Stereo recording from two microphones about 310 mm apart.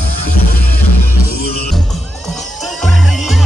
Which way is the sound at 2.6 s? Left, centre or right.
Centre.